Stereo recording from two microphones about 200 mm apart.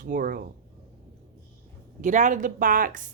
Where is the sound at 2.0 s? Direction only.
40° right (ahead or behind).